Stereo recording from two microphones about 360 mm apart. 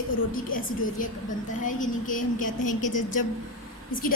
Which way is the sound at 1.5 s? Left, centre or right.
Left.